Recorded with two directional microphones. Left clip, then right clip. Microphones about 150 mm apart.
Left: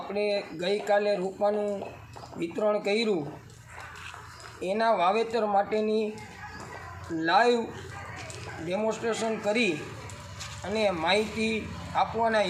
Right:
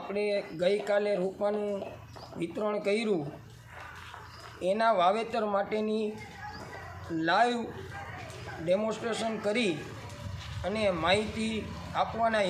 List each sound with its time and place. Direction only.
0.1 s speech: 25° right (ahead or behind)
2.6 s speech: 30° right (ahead or behind)
4.7 s speech: 25° right (ahead or behind)
7.2 s speech: 25° right (ahead or behind)
8.6 s speech: 25° right (ahead or behind)